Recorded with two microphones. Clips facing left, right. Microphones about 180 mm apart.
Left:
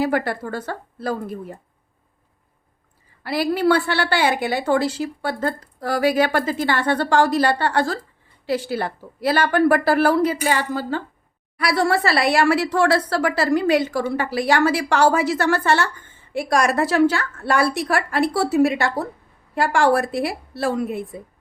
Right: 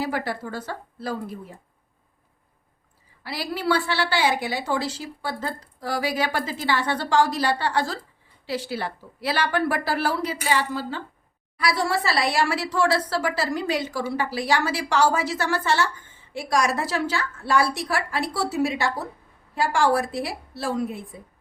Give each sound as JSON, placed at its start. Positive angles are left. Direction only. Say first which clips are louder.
{"t": 0.0, "sound": "a woman's voice", "louder": "left 6 dB", "side_deg": 60}
{"t": 3.2, "sound": "a woman's voice", "louder": "left 7 dB", "side_deg": 55}
{"t": 11.5, "sound": "a woman's voice", "louder": "left 4 dB", "side_deg": 60}